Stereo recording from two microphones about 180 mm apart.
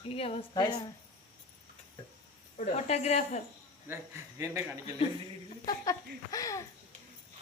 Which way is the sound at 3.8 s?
15° right (ahead or behind).